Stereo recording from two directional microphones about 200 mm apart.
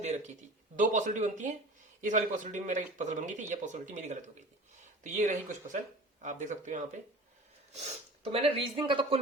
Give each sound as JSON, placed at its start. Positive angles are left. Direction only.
{"t": 0.0, "sound": "speech", "side_deg": -35}
{"t": 8.3, "sound": "speech", "side_deg": -30}